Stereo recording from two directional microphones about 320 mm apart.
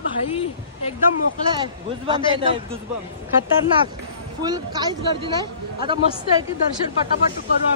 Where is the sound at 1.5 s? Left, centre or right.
Centre.